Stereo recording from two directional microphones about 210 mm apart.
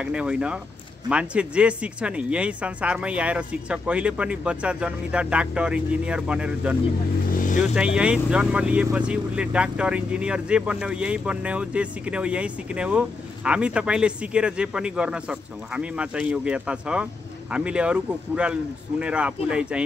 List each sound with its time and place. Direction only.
0.0 s speech: 5° right (ahead or behind)
7.3 s vehicle: 40° left (ahead or behind)
7.7 s speech: 5° right (ahead or behind)